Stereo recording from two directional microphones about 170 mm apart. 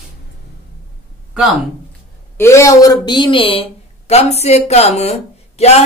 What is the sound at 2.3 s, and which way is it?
A woman's voice, 15° left (ahead or behind).